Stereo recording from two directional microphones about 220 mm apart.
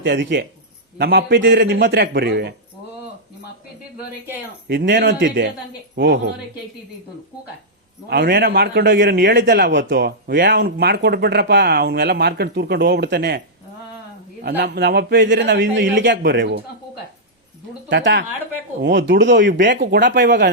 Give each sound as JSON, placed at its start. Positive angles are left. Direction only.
{"t": 0.0, "sound": "a man's voice", "side_deg": -55}
{"t": 4.7, "sound": "a man's voice", "side_deg": -50}
{"t": 8.1, "sound": "a man's voice", "side_deg": -45}
{"t": 14.4, "sound": "a man's voice", "side_deg": -45}
{"t": 17.8, "sound": "a man's voice", "side_deg": -55}